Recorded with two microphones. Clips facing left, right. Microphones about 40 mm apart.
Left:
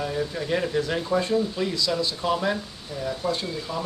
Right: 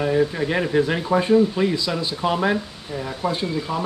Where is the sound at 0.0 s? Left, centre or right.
Right.